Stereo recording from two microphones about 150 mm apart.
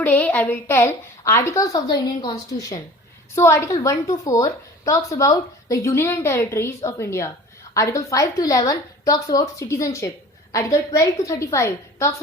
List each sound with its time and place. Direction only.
0.0 s a woman's voice: 10° left (ahead or behind)